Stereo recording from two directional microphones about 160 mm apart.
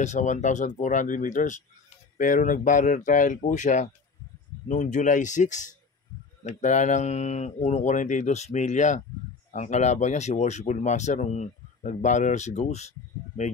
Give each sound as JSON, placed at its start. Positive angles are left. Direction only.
{"t": 0.0, "sound": "speech", "side_deg": 45}